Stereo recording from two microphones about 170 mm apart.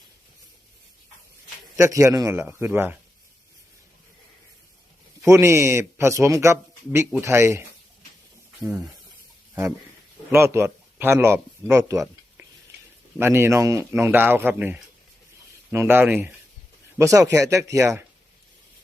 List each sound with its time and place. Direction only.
1.7 s speech: 20° right (ahead or behind)
5.2 s speech: 15° right (ahead or behind)
10.3 s speech: 15° right (ahead or behind)